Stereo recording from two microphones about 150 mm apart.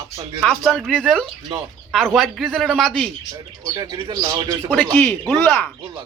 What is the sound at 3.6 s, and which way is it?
Speech, 25° right (ahead or behind).